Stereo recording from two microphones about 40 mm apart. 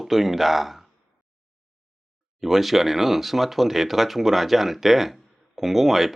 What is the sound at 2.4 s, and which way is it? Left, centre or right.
Speech, centre.